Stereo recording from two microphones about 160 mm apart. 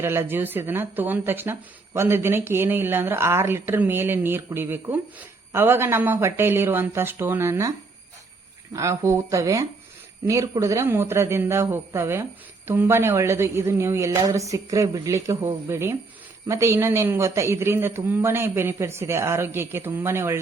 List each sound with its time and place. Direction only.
0.0 s speech: 15° right (ahead or behind)
8.7 s speech: 20° right (ahead or behind)